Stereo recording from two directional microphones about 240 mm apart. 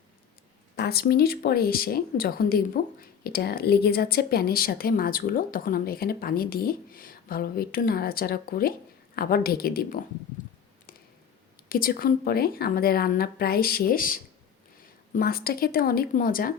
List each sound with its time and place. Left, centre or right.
0.8 s a woman's voice: left
11.7 s a woman's voice: left